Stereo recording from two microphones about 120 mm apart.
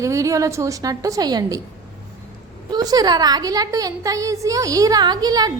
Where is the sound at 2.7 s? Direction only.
35° right (ahead or behind).